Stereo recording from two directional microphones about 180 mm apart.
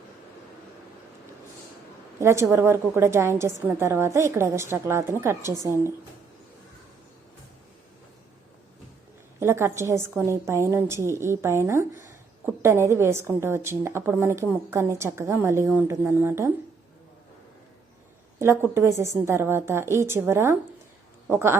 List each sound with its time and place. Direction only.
2.1 s a woman's voice: 15° right (ahead or behind)
9.4 s a woman's voice: 15° right (ahead or behind)
18.3 s a woman's voice: 15° right (ahead or behind)